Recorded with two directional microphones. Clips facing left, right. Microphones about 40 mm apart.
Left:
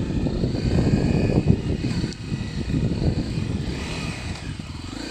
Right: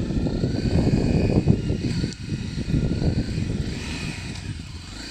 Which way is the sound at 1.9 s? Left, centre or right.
Centre.